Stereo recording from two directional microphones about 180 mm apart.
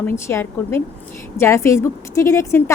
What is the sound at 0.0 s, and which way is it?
A woman's voice, 15° left (ahead or behind).